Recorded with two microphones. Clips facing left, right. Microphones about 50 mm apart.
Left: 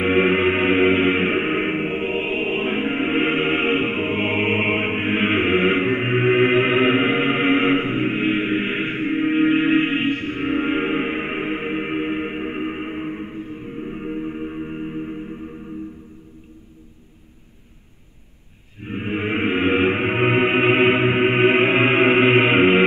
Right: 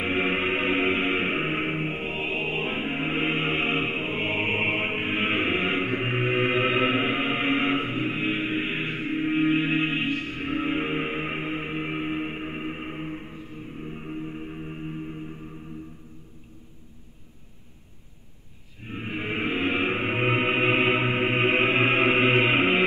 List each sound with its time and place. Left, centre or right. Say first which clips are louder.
0.0 s music: left 8 dB; left
18.9 s music: left 7 dB; left